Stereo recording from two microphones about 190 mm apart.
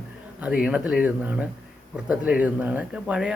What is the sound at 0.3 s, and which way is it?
Speech, 5° right (ahead or behind).